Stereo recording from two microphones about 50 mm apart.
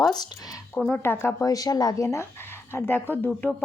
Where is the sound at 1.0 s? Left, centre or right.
Left.